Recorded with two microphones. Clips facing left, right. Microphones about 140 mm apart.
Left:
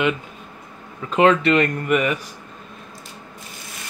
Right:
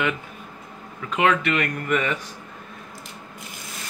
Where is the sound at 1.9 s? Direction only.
15° left (ahead or behind).